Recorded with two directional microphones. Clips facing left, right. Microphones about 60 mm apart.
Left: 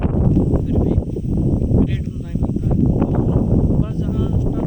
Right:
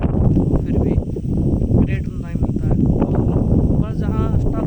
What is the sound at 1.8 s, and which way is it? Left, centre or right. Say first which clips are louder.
Speech: even; right.